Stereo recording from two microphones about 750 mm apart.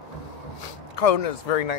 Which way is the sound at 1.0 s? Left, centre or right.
Left.